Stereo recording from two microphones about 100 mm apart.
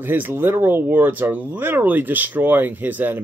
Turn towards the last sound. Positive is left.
turn(degrees=-20)  # may be behind; listen again after turning